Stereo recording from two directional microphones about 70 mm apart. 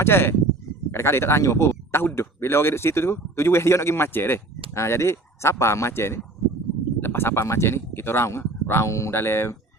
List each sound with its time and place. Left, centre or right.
0.0 s speech: left